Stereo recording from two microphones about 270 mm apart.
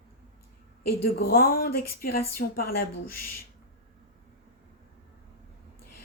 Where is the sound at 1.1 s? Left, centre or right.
Left.